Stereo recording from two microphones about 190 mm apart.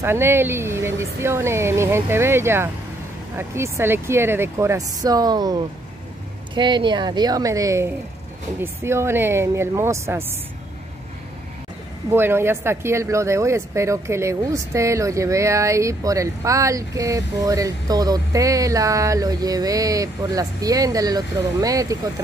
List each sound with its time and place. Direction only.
0.0 s a woman's voice: 10° right (ahead or behind)
12.1 s speech: 10° right (ahead or behind)